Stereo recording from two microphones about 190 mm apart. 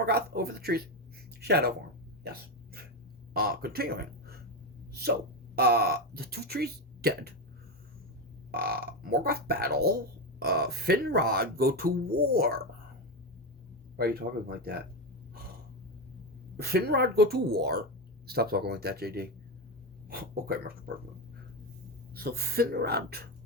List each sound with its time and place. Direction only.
0.0 s speech: 55° right (ahead or behind)
2.2 s hiccup: 55° right (ahead or behind)
3.3 s speech: 55° right (ahead or behind)
5.5 s speech: 55° right (ahead or behind)
8.5 s speech: 55° right (ahead or behind)
14.0 s speech: 55° right (ahead or behind)
16.6 s speech: 55° right (ahead or behind)
22.1 s speech: 55° right (ahead or behind)